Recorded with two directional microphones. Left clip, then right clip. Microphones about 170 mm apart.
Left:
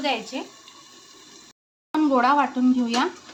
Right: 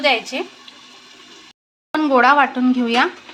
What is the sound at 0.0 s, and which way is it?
Speech, 20° right (ahead or behind).